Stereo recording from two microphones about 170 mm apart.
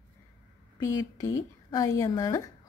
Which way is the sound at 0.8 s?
20° left (ahead or behind).